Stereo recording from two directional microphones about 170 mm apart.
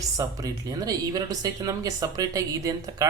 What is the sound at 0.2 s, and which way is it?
Speech, 20° right (ahead or behind).